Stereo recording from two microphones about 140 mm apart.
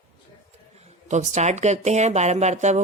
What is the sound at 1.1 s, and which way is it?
Speech, 55° right (ahead or behind).